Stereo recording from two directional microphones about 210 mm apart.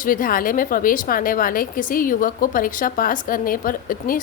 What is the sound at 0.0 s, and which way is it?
A woman's voice, 40° left (ahead or behind).